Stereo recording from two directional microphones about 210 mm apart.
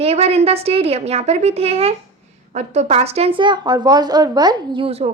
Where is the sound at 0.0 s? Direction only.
30° right (ahead or behind).